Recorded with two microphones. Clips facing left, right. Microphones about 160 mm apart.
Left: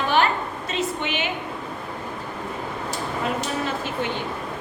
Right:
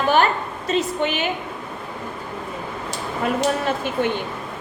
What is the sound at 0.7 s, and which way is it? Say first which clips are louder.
Speech: right 6 dB; 40° right (ahead or behind).